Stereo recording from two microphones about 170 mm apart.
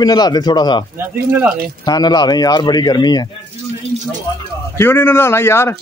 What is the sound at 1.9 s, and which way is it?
Speech, 25° left (ahead or behind).